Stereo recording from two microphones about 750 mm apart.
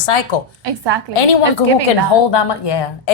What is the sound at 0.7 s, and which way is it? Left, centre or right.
Speech, right.